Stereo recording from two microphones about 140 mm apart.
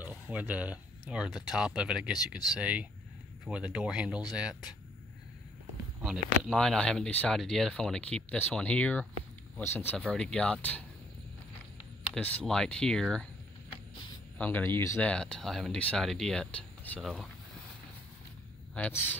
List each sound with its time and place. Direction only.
0.0 s speech: 10° right (ahead or behind)
6.0 s speech: 5° left (ahead or behind)
12.2 s speech: 10° left (ahead or behind)
14.4 s speech: 15° left (ahead or behind)
15.0 s speech: 5° left (ahead or behind)
18.8 s speech: 15° left (ahead or behind)